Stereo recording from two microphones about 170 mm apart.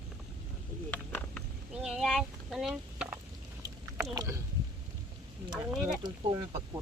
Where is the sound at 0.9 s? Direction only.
5° left (ahead or behind).